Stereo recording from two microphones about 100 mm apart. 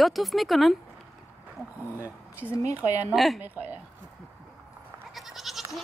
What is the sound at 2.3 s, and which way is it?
Speech, 25° left (ahead or behind).